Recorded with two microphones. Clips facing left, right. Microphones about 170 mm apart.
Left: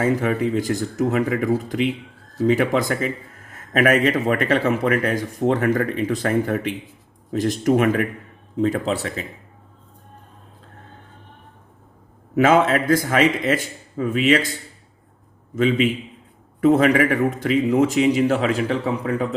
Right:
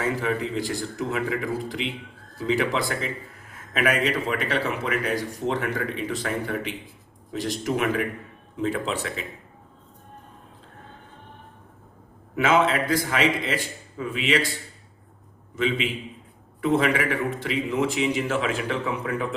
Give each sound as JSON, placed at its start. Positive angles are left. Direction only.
{"t": 0.0, "sound": "a man's voice", "side_deg": 45}
{"t": 12.4, "sound": "a man's voice", "side_deg": 45}
{"t": 15.5, "sound": "a man's voice", "side_deg": 45}